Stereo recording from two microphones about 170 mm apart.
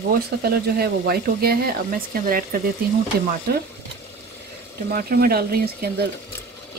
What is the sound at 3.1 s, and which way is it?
Speech, 65° right (ahead or behind).